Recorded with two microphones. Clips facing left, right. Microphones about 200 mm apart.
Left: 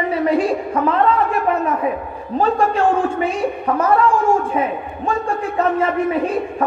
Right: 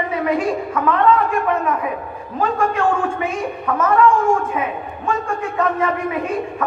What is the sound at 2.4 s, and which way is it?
A man's voice, 35° left (ahead or behind).